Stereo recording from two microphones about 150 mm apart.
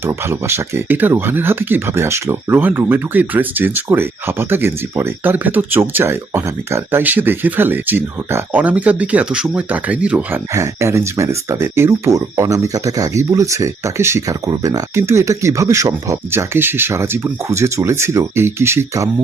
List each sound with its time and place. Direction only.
0.0 s speech: 15° right (ahead or behind)
10.5 s speech: 20° right (ahead or behind)